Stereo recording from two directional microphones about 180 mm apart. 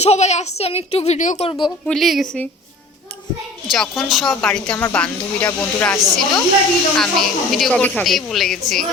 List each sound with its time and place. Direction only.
0.0 s a child's voice: 40° left (ahead or behind)
1.9 s speech: centre (ahead or behind)
3.7 s speech: centre (ahead or behind)